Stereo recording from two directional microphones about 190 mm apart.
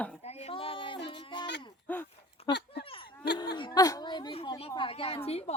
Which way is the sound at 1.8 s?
10° left (ahead or behind).